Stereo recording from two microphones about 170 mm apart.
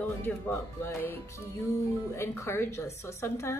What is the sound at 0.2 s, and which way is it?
A woman's voice, 15° left (ahead or behind).